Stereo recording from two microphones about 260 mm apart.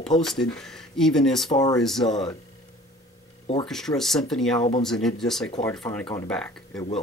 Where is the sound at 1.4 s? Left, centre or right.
Centre.